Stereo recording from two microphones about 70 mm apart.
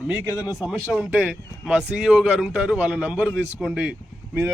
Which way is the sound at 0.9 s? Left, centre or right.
Centre.